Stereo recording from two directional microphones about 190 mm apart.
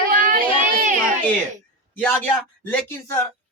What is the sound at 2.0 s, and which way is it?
Speech, 10° left (ahead or behind).